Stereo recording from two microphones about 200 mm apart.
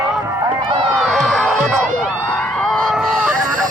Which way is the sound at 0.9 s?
Centre (ahead or behind).